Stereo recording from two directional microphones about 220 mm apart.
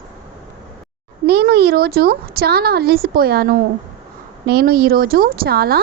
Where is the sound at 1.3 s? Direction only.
45° right (ahead or behind).